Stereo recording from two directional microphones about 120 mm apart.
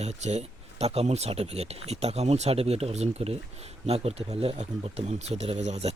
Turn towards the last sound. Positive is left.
turn(degrees=-65)  # may be behind; listen again after turning